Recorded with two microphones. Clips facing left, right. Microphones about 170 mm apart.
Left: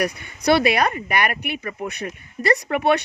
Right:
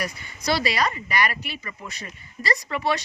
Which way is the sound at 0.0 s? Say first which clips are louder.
Left 7 dB; 60° left (ahead or behind).